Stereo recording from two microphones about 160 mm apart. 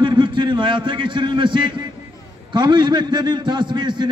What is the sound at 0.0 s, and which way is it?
A man's voice, 30° right (ahead or behind).